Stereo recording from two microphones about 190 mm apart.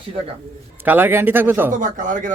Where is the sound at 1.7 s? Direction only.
45° right (ahead or behind).